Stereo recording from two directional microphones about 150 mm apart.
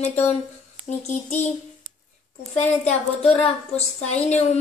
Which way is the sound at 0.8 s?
50° left (ahead or behind).